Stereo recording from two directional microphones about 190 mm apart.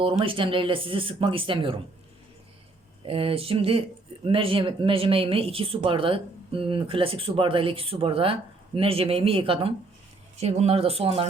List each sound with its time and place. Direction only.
0.0 s speech: 25° right (ahead or behind)
3.1 s speech: 30° right (ahead or behind)